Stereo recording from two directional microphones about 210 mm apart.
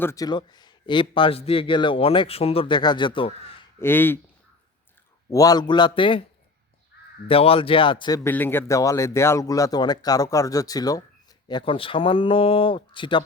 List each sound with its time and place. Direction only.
0.0 s a man's voice: 15° left (ahead or behind)
3.8 s speech: 10° left (ahead or behind)
5.3 s a man's voice: 15° left (ahead or behind)
7.3 s a man's voice: 25° left (ahead or behind)